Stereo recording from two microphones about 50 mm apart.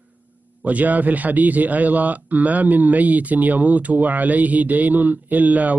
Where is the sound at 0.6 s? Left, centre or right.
Right.